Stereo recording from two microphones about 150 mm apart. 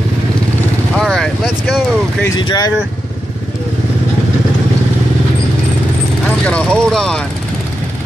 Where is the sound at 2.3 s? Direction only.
25° left (ahead or behind).